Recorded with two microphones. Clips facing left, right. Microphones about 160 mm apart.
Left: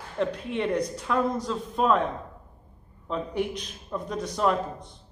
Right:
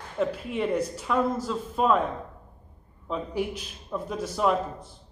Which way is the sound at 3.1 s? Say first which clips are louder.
Left 1 dB; 5° right (ahead or behind).